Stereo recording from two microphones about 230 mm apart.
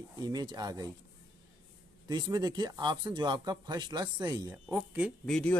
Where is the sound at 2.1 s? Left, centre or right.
Centre.